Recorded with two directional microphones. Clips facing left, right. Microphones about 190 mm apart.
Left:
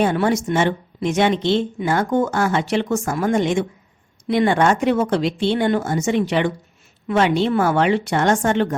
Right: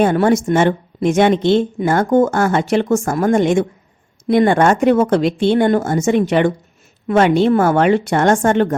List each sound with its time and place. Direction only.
0.0 s a woman's voice: 50° right (ahead or behind)